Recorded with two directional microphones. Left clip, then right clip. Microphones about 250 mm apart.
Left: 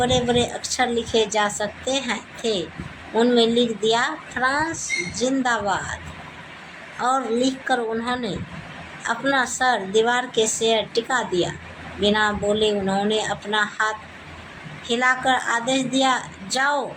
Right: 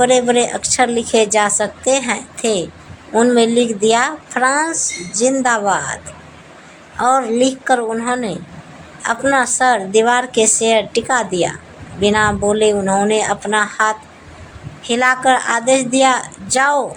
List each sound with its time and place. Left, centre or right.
0.0 s a woman's voice: right
7.0 s a woman's voice: right